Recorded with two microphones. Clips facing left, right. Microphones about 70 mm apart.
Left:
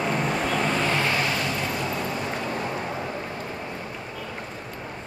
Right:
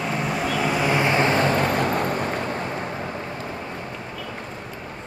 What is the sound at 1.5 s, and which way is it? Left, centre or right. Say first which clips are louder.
Vehicle: right 7 dB; right.